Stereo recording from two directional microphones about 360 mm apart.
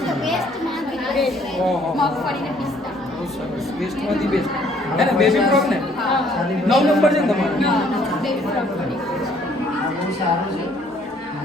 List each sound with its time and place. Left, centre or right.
0.1 s children playing: centre
1.0 s a woman's voice: centre
4.1 s speech: centre